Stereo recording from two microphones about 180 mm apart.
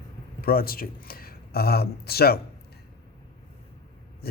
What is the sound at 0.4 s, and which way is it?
Speech, 55° left (ahead or behind).